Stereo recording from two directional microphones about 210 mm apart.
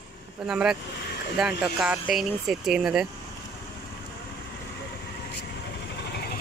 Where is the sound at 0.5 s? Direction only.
5° right (ahead or behind).